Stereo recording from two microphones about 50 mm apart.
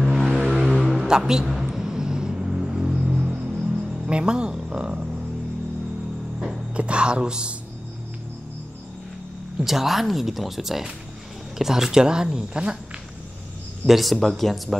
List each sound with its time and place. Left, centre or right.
0.0 s vehicle: centre
0.5 s music: centre
0.9 s a sound: centre
6.7 s a woman's voice: right
9.6 s speech: centre
13.8 s speech: centre